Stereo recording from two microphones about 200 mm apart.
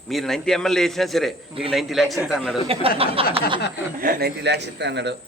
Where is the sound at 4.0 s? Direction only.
50° right (ahead or behind).